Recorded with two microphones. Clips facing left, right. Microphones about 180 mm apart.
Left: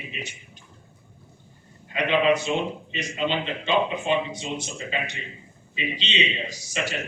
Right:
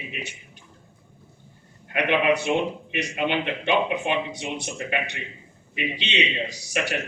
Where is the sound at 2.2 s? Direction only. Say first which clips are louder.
Left 1 dB; 65° right (ahead or behind).